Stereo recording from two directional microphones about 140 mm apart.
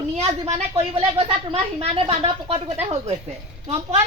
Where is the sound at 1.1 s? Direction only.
40° right (ahead or behind).